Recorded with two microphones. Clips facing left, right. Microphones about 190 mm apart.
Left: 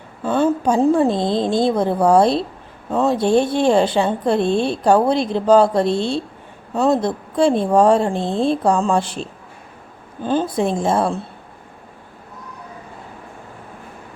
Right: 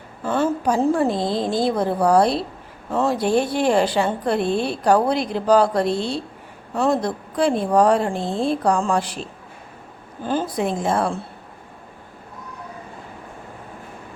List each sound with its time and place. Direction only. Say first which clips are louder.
0.3 s a woman's voice: left 3 dB; 20° left (ahead or behind)
10.2 s a woman's voice: left 4 dB; 25° left (ahead or behind)